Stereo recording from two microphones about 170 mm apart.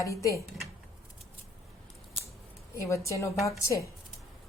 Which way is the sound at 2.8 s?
15° left (ahead or behind).